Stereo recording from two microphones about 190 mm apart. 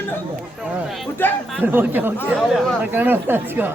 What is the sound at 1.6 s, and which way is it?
Speech, 10° right (ahead or behind).